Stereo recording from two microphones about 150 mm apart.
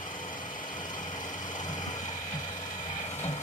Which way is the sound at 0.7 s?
60° left (ahead or behind).